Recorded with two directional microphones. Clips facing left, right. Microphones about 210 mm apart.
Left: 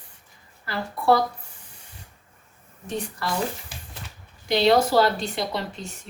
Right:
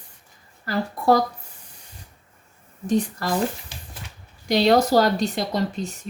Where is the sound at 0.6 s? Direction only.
40° right (ahead or behind).